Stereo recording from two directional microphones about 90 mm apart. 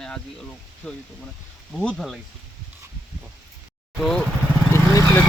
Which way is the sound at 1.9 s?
Centre (ahead or behind).